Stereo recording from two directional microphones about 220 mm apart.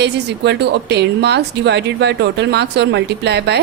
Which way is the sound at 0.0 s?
50° right (ahead or behind).